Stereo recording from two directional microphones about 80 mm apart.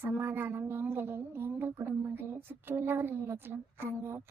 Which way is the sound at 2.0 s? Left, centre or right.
Right.